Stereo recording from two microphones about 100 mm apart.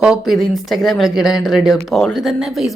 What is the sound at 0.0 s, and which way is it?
Speech, 5° right (ahead or behind).